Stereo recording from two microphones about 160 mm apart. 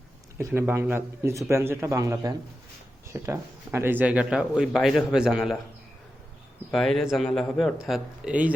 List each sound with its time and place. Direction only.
0.3 s a man's voice: 15° right (ahead or behind)
6.7 s a man's voice: centre (ahead or behind)